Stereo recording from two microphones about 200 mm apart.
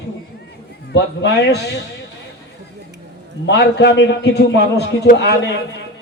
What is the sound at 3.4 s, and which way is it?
A man's voice, 60° left (ahead or behind).